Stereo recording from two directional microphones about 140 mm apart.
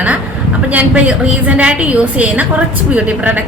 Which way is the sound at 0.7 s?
10° right (ahead or behind).